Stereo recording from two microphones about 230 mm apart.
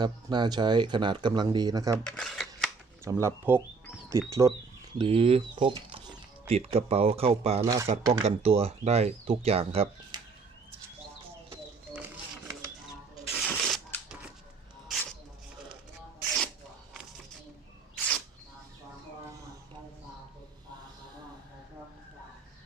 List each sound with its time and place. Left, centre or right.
0.0 s speech: centre
2.0 s camera: centre
3.0 s speech: centre
4.9 s speech: right
7.6 s speech: centre
8.0 s speech: right
13.3 s a sound: centre
17.9 s a sound: centre